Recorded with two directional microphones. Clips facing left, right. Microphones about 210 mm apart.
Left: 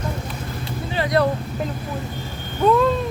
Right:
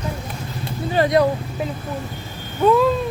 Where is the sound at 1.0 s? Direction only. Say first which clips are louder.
Right 6 dB; 45° right (ahead or behind).